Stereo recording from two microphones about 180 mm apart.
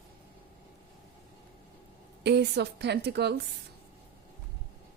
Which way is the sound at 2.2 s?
70° right (ahead or behind).